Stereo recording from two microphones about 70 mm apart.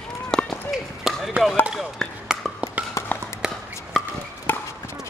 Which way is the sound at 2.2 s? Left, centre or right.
Centre.